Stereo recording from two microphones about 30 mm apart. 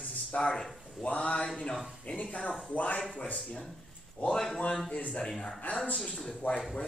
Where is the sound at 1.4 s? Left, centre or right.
Left.